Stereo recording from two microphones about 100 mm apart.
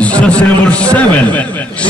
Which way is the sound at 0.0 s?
15° left (ahead or behind).